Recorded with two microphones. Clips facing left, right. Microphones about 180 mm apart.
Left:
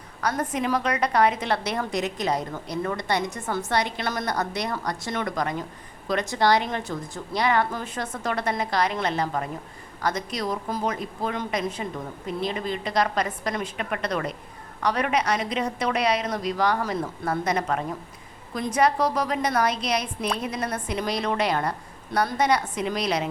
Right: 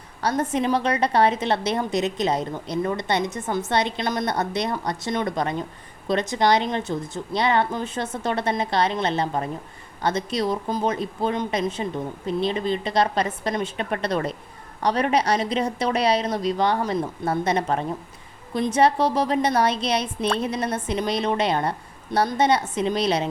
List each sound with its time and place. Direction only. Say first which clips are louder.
0.2 s a woman's voice: right 3 dB; 30° right (ahead or behind)